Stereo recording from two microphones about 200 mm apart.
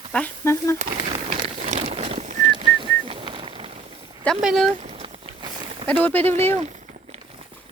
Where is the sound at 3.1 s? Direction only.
25° right (ahead or behind).